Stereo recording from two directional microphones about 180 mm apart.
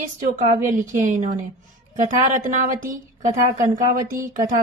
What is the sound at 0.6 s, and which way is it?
A woman's voice, 45° right (ahead or behind).